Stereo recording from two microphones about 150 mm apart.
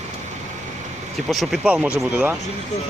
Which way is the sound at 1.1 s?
Centre (ahead or behind).